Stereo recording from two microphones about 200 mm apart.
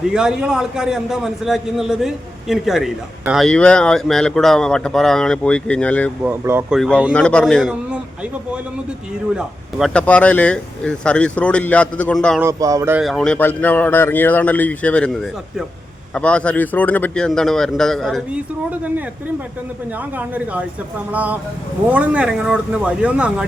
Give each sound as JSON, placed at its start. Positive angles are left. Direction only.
{"t": 0.1, "sound": "a man's voice", "side_deg": -5}
{"t": 6.2, "sound": "speech", "side_deg": -10}
{"t": 6.7, "sound": "a man's voice", "side_deg": 0}
{"t": 9.7, "sound": "a man's voice", "side_deg": 0}
{"t": 12.4, "sound": "speech", "side_deg": -15}
{"t": 13.0, "sound": "a man's voice", "side_deg": 0}
{"t": 20.1, "sound": "a man's voice", "side_deg": -5}